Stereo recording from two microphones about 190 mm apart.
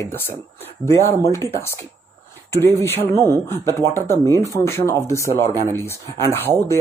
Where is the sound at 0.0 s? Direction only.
10° left (ahead or behind).